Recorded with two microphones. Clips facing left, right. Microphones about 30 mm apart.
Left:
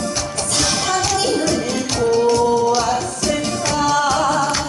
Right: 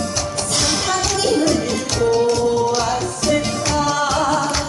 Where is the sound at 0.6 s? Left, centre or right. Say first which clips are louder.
Left 1 dB; centre.